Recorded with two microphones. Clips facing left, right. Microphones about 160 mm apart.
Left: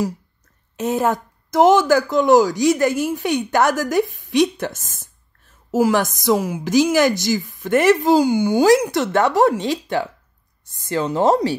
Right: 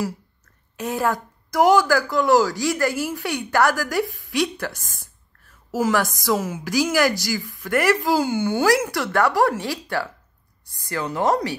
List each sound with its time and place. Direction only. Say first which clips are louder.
0.7 s a woman's voice: left 4 dB; 20° left (ahead or behind)